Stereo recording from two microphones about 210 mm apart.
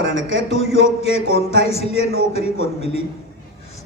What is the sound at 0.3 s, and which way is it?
Speech, 30° left (ahead or behind).